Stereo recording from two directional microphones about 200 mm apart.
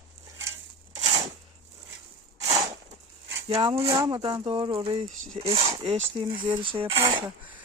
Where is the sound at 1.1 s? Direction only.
35° right (ahead or behind).